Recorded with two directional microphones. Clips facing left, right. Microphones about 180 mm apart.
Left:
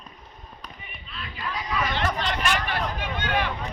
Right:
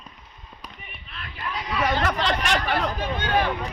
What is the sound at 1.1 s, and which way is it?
Chatter, 55° right (ahead or behind).